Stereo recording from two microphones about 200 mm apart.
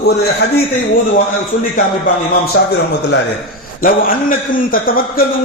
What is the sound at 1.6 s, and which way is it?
Speech, 45° left (ahead or behind).